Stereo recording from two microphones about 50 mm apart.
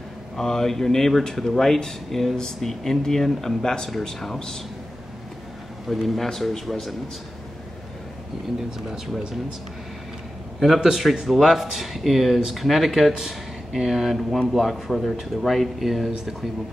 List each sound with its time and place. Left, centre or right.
0.4 s speech: centre
5.9 s speech: centre
8.5 s speech: centre
10.8 s speech: centre